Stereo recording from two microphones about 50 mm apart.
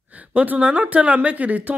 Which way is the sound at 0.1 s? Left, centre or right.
Right.